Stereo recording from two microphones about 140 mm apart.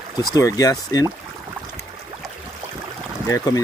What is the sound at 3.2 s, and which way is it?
Speech, 25° left (ahead or behind).